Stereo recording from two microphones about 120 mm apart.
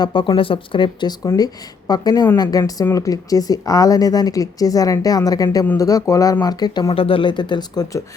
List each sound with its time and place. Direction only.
0.0 s speech: 40° left (ahead or behind)
6.9 s speech: 50° left (ahead or behind)